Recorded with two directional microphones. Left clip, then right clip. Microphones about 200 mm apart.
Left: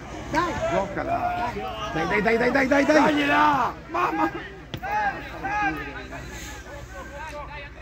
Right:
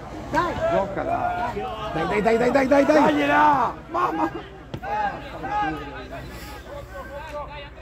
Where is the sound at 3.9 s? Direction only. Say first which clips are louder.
Right 1 dB; 20° right (ahead or behind).